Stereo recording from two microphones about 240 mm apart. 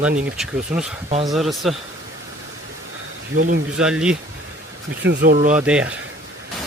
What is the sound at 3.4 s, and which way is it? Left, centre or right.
Speech, right.